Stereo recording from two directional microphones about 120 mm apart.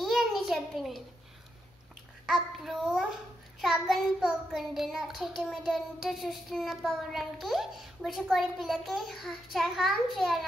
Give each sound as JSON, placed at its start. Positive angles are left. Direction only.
{"t": 0.0, "sound": "a sound", "side_deg": 0}
{"t": 2.2, "sound": "a child's voice", "side_deg": 0}
{"t": 3.6, "sound": "child singing", "side_deg": 0}